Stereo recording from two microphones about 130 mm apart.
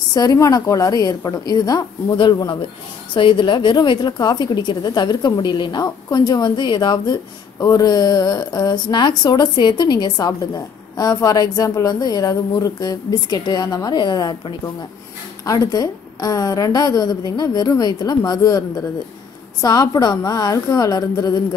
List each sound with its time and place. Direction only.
0.1 s a woman's voice: 30° left (ahead or behind)
19.6 s a woman's voice: 30° left (ahead or behind)